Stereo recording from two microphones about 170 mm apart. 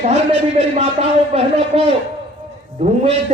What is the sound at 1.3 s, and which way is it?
A man's voice, 35° right (ahead or behind).